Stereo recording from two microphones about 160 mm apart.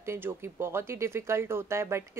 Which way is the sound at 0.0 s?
15° right (ahead or behind).